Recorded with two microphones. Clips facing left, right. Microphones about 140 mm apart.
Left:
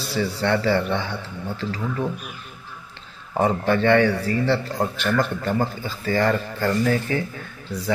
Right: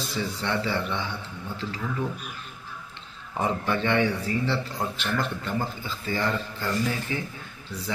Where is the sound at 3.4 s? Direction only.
60° left (ahead or behind).